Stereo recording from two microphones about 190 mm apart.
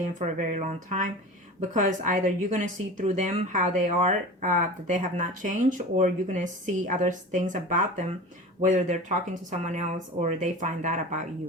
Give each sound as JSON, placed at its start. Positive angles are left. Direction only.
{"t": 0.1, "sound": "speech", "side_deg": -45}